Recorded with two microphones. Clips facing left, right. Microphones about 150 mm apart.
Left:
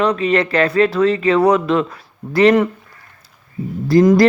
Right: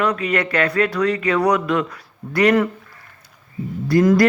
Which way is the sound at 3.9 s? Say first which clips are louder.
Left 4 dB; 25° left (ahead or behind).